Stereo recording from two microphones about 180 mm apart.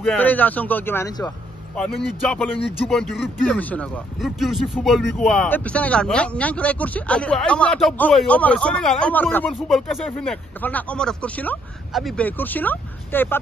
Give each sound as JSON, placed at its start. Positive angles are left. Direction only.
{"t": 0.0, "sound": "a man's voice", "side_deg": 10}
{"t": 1.8, "sound": "a man's voice", "side_deg": 5}